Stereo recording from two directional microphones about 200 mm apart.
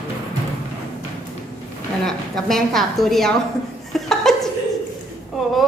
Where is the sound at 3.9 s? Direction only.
Centre (ahead or behind).